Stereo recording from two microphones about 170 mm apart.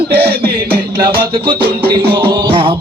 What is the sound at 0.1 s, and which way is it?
Music, 65° right (ahead or behind).